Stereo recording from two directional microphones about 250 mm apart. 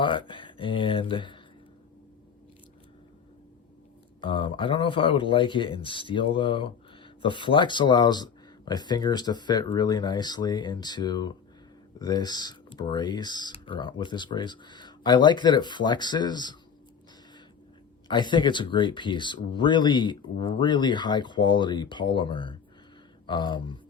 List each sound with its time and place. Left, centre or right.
0.0 s speech: centre
4.2 s speech: centre
18.1 s speech: centre